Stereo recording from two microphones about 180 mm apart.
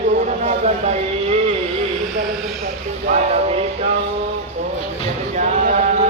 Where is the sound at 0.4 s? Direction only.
40° right (ahead or behind).